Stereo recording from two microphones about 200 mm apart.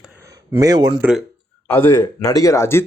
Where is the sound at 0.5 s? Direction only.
20° right (ahead or behind).